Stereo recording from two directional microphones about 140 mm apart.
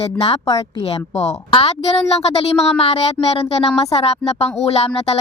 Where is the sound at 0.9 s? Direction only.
45° left (ahead or behind).